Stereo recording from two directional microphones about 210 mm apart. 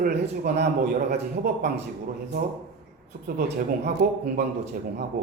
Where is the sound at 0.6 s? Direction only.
35° right (ahead or behind).